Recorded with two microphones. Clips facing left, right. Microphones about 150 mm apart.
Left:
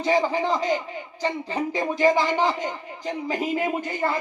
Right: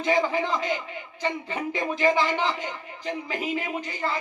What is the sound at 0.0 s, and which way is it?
Speech, 35° left (ahead or behind).